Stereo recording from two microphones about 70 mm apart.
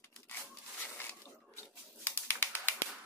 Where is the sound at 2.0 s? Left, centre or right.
Left.